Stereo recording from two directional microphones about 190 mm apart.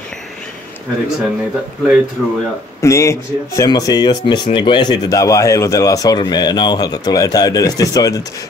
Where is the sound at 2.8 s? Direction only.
15° left (ahead or behind).